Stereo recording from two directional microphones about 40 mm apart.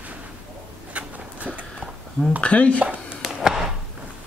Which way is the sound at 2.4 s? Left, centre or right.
Left.